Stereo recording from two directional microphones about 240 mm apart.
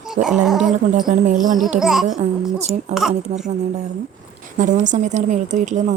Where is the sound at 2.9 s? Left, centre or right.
Centre.